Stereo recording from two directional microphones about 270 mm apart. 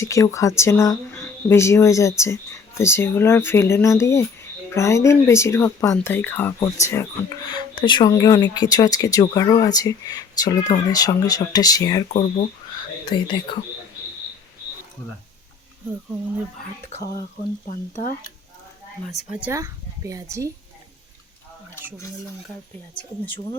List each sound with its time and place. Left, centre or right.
0.0 s speech: centre
13.1 s speech: centre
17.7 s speech: left
19.4 s a woman's voice: centre